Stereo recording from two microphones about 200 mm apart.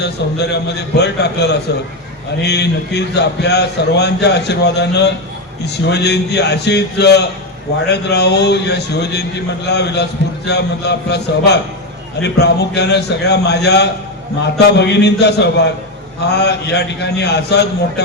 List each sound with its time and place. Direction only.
0.0 s a man's voice: 55° left (ahead or behind)